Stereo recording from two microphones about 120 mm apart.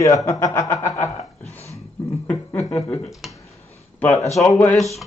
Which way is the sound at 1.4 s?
15° left (ahead or behind).